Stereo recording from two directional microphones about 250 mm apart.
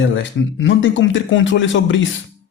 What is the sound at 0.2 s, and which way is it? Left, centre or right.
A man's voice, left.